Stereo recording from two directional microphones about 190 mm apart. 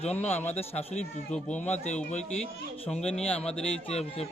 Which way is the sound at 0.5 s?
35° left (ahead or behind).